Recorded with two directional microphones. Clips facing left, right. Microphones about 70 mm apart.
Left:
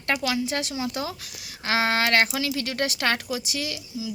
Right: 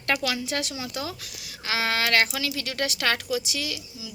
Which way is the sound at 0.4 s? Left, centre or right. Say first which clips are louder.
Left 2 dB; left.